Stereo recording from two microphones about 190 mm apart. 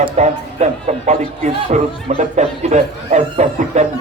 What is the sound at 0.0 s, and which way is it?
A man's voice, 35° right (ahead or behind).